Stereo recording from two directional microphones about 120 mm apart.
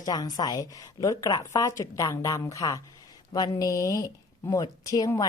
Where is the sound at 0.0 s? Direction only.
35° left (ahead or behind).